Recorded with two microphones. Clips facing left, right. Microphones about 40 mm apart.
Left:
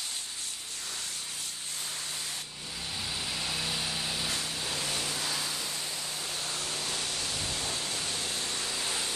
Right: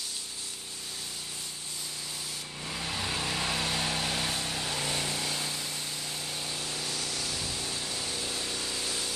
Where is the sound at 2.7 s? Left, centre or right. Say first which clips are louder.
Right 4 dB; right.